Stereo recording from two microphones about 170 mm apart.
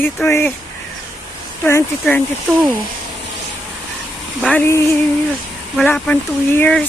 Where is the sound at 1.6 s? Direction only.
15° left (ahead or behind).